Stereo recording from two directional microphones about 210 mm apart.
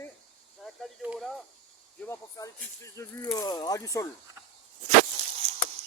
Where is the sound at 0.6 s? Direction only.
5° right (ahead or behind).